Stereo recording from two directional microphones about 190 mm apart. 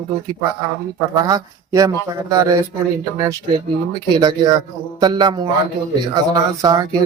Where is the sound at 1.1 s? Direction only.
20° right (ahead or behind).